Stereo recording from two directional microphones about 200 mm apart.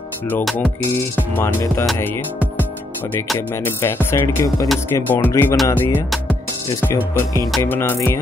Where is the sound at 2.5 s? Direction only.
10° left (ahead or behind).